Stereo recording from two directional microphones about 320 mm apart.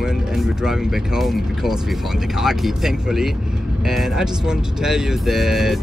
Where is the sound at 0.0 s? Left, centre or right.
Centre.